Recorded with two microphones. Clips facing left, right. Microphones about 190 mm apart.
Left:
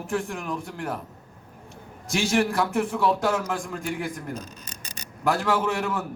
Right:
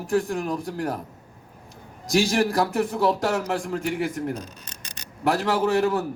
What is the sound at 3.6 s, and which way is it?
Speech, 70° right (ahead or behind).